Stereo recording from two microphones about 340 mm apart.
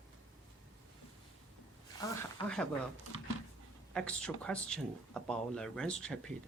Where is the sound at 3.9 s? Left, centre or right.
Centre.